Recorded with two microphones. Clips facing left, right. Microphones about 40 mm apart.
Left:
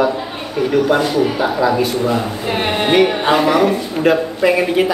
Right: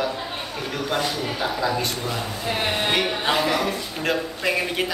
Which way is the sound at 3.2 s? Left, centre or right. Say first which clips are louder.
Left 8 dB; left.